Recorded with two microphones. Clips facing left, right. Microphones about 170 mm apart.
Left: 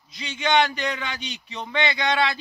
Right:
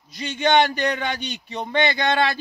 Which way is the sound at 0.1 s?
45° right (ahead or behind).